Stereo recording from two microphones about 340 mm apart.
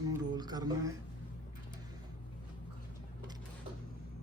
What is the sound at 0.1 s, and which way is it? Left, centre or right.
Music, centre.